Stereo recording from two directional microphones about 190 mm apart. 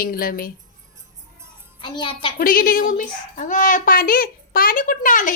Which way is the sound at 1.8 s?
25° left (ahead or behind).